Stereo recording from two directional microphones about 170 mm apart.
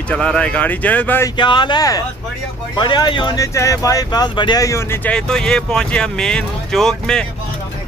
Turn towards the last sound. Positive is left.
turn(degrees=5)  # may be behind; listen again after turning